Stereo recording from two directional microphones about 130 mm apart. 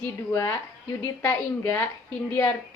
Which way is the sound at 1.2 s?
10° left (ahead or behind).